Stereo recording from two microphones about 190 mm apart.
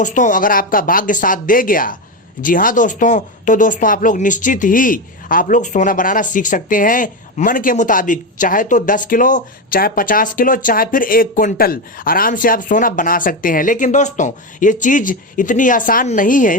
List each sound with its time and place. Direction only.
0.0 s speech: 40° left (ahead or behind)